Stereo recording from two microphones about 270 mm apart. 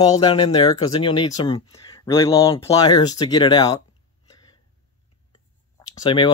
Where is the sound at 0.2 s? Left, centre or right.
Centre.